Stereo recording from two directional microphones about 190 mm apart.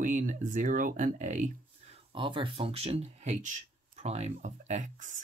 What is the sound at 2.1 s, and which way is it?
Speech, 25° right (ahead or behind).